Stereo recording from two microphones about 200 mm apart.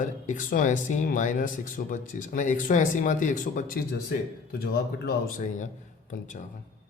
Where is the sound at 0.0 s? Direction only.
40° left (ahead or behind).